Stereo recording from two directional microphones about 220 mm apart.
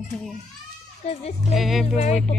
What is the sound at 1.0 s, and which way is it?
Speech, 30° left (ahead or behind).